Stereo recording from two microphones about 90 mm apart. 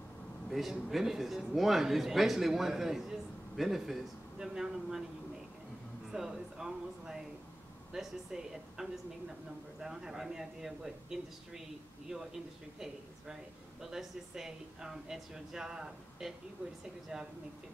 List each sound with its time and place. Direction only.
0.5 s a man's voice: centre (ahead or behind)
6.1 s a man's voice: 5° right (ahead or behind)
12.8 s a man's voice: 5° right (ahead or behind)